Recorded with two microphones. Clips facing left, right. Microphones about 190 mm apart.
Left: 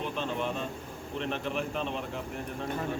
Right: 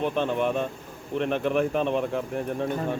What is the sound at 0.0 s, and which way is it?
Speech, 60° right (ahead or behind).